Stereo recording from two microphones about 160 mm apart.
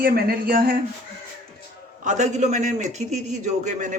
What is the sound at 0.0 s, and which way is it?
Speech, 70° right (ahead or behind).